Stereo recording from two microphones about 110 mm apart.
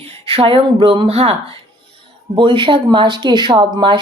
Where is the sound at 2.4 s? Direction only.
50° right (ahead or behind).